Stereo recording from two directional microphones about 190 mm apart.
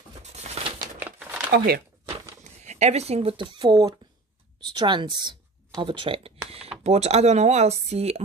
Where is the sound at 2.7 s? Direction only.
35° right (ahead or behind).